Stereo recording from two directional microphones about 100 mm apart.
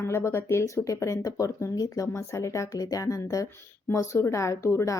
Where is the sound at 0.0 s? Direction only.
25° left (ahead or behind).